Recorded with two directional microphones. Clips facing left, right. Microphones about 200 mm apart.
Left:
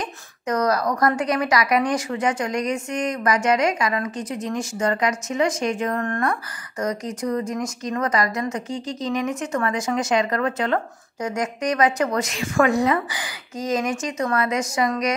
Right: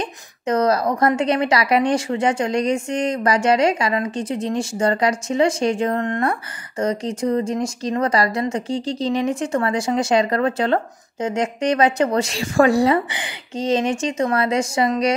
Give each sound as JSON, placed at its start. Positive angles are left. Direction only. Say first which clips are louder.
{"t": 0.0, "sound": "speech", "louder": "right 4 dB", "side_deg": -25}